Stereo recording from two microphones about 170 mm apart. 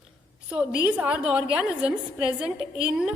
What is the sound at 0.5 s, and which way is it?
A woman's voice, 5° right (ahead or behind).